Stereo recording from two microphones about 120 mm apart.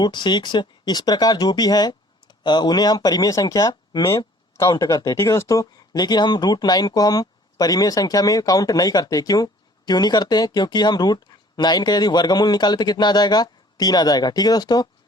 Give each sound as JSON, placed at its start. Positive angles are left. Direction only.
{"t": 0.0, "sound": "speech", "side_deg": 40}